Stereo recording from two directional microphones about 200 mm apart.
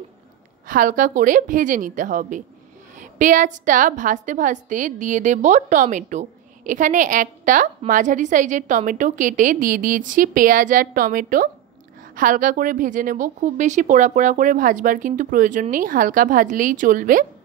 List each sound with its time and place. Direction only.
0.7 s a woman's voice: 40° right (ahead or behind)